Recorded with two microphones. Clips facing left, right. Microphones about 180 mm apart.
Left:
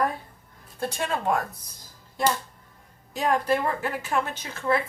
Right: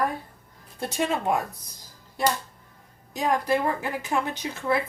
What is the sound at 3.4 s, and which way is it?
A woman's voice, 15° right (ahead or behind).